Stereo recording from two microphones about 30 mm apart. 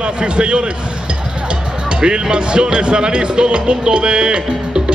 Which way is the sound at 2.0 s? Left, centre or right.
Right.